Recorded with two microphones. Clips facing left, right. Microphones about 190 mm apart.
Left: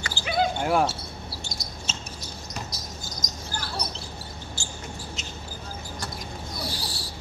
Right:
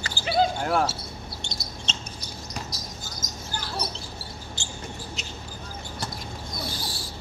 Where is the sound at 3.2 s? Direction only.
5° right (ahead or behind).